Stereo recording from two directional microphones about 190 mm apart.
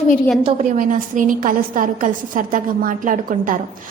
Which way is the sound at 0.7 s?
45° right (ahead or behind).